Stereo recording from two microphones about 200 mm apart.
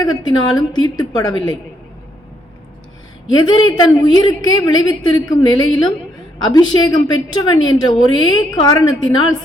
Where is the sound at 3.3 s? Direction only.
20° left (ahead or behind).